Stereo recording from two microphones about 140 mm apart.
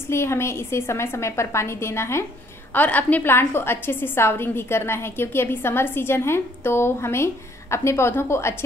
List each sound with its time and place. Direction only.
0.1 s a woman's voice: 20° left (ahead or behind)